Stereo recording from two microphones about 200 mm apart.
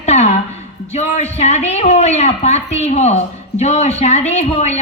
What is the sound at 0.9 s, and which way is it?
A woman's voice, 35° left (ahead or behind).